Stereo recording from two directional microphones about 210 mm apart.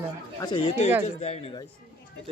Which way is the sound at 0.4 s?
25° left (ahead or behind).